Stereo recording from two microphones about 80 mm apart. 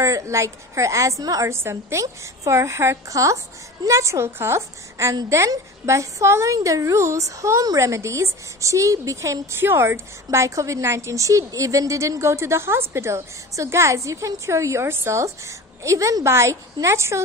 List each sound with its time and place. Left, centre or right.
0.0 s a woman's voice: right
1.5 s a woman's voice: right